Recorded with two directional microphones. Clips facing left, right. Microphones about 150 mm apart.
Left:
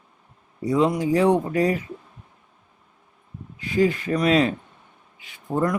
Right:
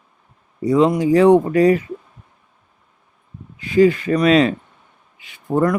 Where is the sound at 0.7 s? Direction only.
75° right (ahead or behind).